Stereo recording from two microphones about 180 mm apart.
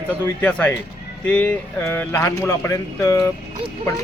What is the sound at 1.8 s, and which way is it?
A man's voice, 15° left (ahead or behind).